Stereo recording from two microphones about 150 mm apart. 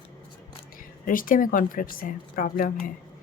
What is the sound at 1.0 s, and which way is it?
Speech, 65° left (ahead or behind).